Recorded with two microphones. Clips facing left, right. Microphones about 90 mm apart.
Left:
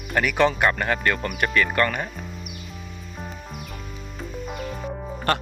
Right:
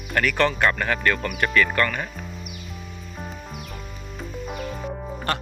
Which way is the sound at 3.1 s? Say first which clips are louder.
Right 1 dB; centre (ahead or behind).